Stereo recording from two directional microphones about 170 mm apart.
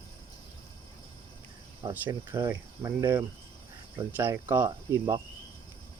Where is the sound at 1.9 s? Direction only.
10° right (ahead or behind).